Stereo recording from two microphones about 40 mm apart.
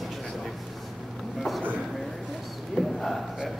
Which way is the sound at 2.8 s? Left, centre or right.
Centre.